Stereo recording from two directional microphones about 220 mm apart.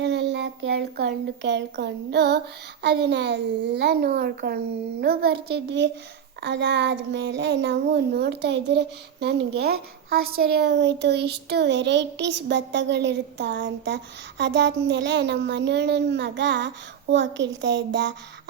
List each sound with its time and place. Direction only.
0.0 s a child's voice: 50° right (ahead or behind)